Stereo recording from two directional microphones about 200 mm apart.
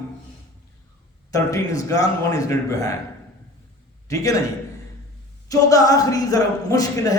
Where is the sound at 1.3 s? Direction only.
15° left (ahead or behind).